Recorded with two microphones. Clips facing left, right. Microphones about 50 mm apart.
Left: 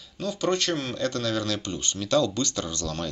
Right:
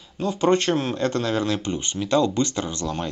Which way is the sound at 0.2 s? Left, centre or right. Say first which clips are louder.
Right 6 dB; right.